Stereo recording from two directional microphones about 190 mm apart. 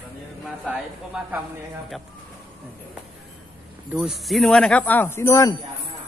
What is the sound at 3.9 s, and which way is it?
Speech, 5° right (ahead or behind).